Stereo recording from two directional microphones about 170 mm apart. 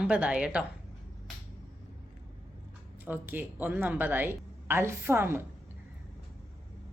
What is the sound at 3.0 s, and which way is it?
Speech, 10° right (ahead or behind).